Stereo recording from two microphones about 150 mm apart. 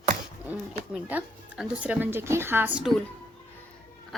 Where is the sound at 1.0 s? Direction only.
10° right (ahead or behind).